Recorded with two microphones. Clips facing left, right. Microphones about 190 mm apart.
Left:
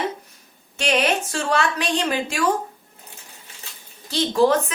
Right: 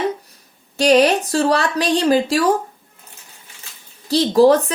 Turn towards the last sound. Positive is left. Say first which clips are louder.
# right 6 dB
turn(degrees=-35)  # may be behind; listen again after turning